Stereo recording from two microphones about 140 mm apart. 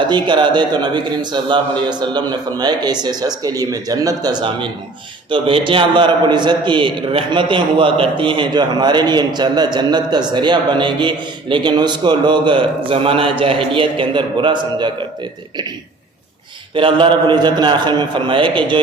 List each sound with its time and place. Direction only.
0.0 s a man's voice: 35° right (ahead or behind)
16.7 s a man's voice: 35° right (ahead or behind)